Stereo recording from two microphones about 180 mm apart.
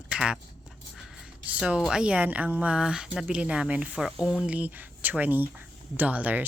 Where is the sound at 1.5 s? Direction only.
5° right (ahead or behind).